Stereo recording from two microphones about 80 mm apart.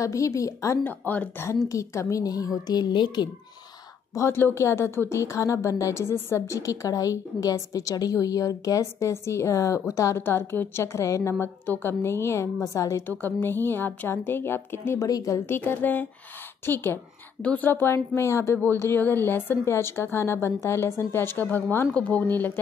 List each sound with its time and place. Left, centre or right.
0.0 s a woman's voice: left
0.8 s speech: left
1.7 s a woman's voice: left
4.1 s speech: left
13.2 s speech: left
15.0 s a woman's voice: left
15.4 s speech: left